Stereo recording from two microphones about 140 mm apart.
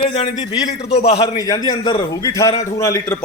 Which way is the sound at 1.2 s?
30° left (ahead or behind).